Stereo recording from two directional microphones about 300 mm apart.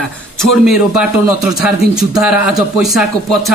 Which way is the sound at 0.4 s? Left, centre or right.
Centre.